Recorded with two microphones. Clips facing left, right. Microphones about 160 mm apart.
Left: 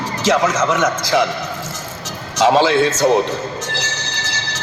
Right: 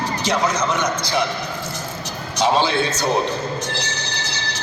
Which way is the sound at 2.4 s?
90° left.